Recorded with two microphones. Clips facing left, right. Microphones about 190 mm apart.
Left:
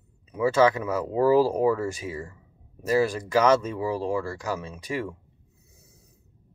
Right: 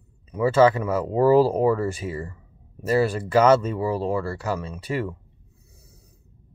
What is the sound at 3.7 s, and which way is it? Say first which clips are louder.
Speech: right 2 dB; 15° left (ahead or behind).